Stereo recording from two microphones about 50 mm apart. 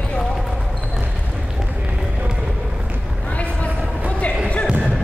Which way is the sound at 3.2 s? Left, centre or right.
Left.